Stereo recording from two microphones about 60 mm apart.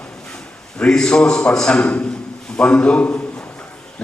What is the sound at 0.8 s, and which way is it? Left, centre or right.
A man's voice, centre.